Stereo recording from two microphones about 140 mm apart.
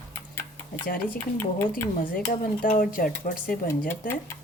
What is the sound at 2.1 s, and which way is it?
Dishes, 90° left.